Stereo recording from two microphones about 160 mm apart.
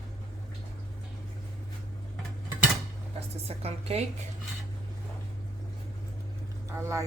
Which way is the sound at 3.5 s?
40° right (ahead or behind).